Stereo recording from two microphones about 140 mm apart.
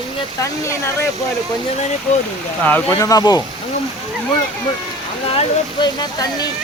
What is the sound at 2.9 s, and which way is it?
Speech, 25° left (ahead or behind).